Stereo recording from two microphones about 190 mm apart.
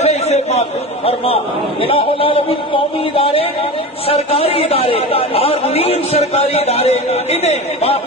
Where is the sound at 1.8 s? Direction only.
30° left (ahead or behind).